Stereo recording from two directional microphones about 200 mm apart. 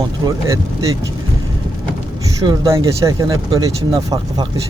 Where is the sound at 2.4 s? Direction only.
15° right (ahead or behind).